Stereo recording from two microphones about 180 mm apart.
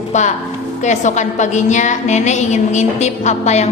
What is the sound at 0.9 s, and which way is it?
A woman's voice, 40° left (ahead or behind).